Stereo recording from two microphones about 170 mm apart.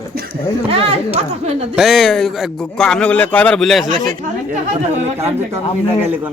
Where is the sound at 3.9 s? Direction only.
45° right (ahead or behind).